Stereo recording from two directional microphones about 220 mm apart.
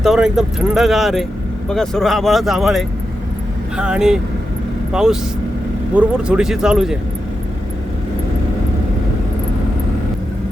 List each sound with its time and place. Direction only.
0.0 s speech: centre (ahead or behind)